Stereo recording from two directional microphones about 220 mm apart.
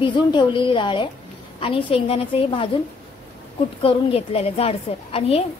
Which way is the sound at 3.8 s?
25° left (ahead or behind).